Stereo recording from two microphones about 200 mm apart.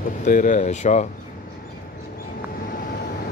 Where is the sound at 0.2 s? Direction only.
40° left (ahead or behind).